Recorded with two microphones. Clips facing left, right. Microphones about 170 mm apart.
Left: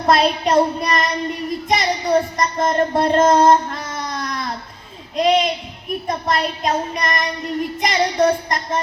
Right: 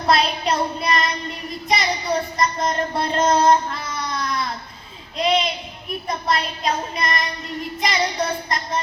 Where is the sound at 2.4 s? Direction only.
50° left (ahead or behind).